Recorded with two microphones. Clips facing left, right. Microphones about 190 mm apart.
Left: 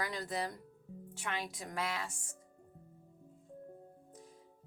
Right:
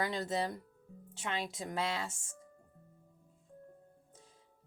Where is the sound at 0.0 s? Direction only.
25° right (ahead or behind).